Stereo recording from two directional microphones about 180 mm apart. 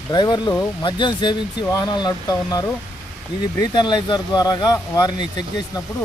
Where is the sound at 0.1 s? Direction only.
25° left (ahead or behind).